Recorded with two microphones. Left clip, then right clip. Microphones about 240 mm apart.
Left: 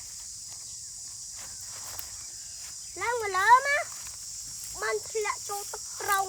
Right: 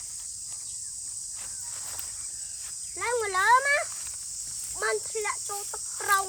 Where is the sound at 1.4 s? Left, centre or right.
Left.